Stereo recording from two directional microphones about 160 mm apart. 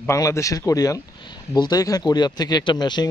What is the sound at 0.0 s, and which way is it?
Speech, 20° left (ahead or behind).